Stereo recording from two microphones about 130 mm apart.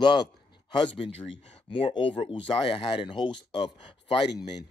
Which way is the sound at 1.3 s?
40° left (ahead or behind).